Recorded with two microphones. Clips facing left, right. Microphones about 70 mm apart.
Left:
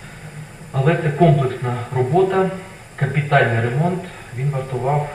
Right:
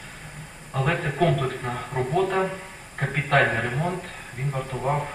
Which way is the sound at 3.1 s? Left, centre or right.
Left.